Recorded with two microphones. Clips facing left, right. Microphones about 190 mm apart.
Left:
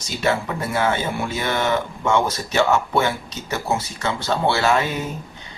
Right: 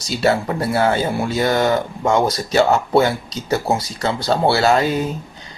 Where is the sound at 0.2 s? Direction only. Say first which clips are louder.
Right 4 dB; 35° right (ahead or behind).